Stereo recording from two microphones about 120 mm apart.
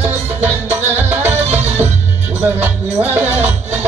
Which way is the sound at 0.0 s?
15° right (ahead or behind).